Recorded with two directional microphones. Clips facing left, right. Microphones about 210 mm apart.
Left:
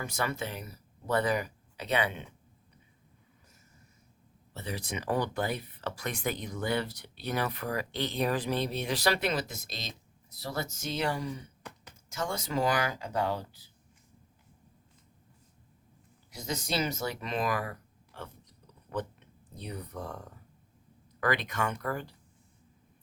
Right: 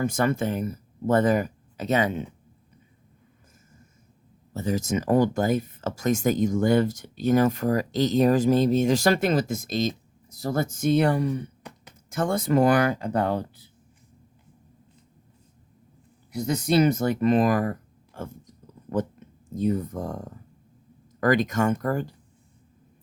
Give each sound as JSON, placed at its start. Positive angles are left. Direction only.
{"t": 0.0, "sound": "speech", "side_deg": -50}
{"t": 4.5, "sound": "speech", "side_deg": -45}
{"t": 16.3, "sound": "speech", "side_deg": -55}